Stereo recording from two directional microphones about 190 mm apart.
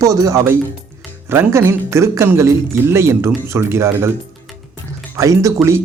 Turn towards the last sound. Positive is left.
turn(degrees=-15)  # may be behind; listen again after turning